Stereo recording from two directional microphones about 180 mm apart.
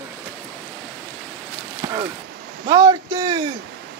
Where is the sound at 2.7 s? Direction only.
20° right (ahead or behind).